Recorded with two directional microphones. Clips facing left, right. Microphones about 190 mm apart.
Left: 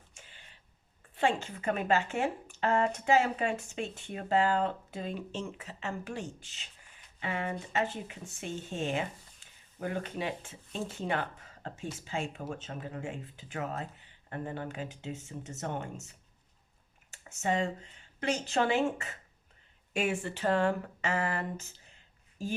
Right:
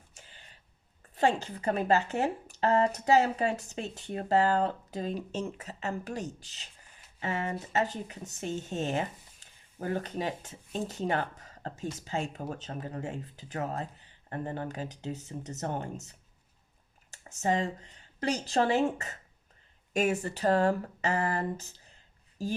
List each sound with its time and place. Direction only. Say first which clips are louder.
1.1 s speech: right 3 dB; 40° right (ahead or behind)